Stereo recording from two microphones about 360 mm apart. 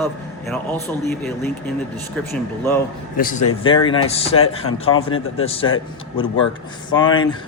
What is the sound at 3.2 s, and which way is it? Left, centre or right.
A man's voice, left.